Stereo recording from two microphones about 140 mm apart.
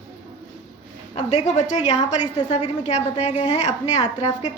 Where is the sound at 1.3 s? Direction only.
55° left (ahead or behind).